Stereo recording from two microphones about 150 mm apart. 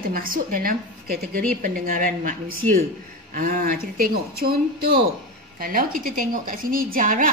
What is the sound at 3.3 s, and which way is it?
A woman's voice, 65° right (ahead or behind).